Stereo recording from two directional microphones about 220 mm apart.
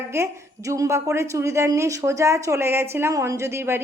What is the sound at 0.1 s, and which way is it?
A woman's voice, 10° right (ahead or behind).